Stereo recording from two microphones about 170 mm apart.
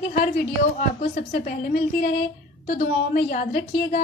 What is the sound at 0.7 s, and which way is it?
A woman's voice, 55° left (ahead or behind).